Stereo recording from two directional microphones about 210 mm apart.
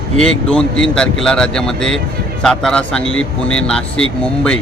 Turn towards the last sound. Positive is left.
turn(degrees=5)  # may be behind; listen again after turning